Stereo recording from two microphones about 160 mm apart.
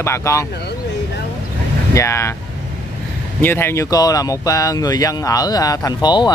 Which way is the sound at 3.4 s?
15° left (ahead or behind).